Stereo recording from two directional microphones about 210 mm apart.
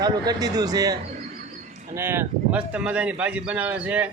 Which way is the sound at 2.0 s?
10° right (ahead or behind).